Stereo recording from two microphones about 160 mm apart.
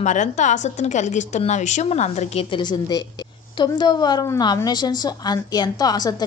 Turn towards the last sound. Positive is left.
turn(degrees=25)  # may be behind; listen again after turning